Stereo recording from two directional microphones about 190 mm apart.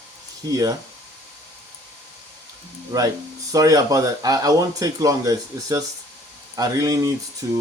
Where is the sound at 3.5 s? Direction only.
20° right (ahead or behind).